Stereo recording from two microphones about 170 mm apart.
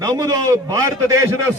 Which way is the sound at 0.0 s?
20° right (ahead or behind).